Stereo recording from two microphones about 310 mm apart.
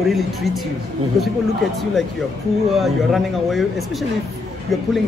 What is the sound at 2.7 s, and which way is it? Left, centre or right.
Speech, centre.